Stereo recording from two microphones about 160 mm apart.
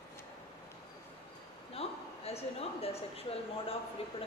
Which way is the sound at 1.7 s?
40° left (ahead or behind).